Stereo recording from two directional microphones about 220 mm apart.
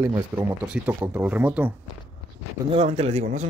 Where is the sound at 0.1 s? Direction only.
10° right (ahead or behind).